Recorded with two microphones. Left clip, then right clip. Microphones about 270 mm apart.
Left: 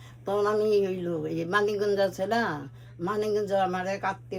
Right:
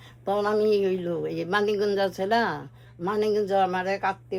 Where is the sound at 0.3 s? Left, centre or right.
Right.